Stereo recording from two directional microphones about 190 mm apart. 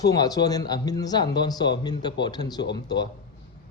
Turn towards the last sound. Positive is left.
turn(degrees=20)  # may be behind; listen again after turning